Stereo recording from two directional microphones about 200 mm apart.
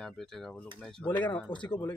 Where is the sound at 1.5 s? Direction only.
25° left (ahead or behind).